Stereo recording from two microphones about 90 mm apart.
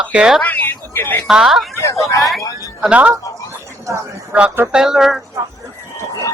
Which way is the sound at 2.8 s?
15° right (ahead or behind).